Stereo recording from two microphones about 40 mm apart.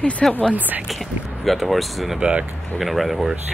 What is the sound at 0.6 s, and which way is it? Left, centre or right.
Speech, right.